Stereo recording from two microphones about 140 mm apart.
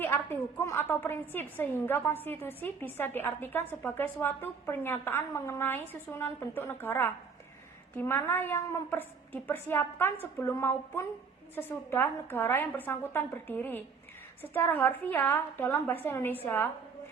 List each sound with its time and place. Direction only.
0.0 s a woman's voice: 15° left (ahead or behind)